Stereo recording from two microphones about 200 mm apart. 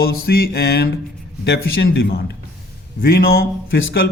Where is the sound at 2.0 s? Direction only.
55° left (ahead or behind).